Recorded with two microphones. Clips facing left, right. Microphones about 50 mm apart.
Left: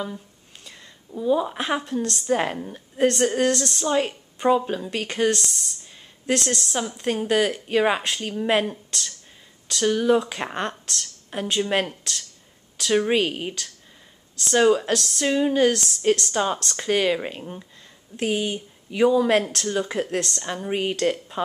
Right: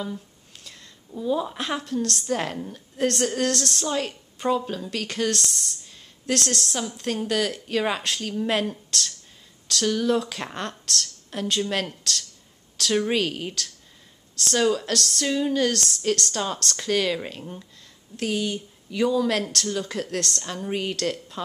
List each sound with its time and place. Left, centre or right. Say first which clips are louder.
0.7 s a woman's voice: left 2 dB; centre